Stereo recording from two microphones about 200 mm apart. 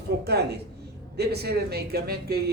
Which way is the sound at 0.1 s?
60° right (ahead or behind).